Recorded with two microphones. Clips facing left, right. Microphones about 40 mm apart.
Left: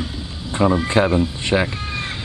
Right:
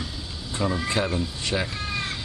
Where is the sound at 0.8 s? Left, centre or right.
Left.